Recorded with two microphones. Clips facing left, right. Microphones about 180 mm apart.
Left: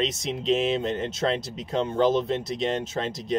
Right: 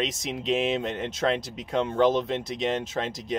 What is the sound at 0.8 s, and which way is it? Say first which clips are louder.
Speech: left 2 dB; 30° left (ahead or behind).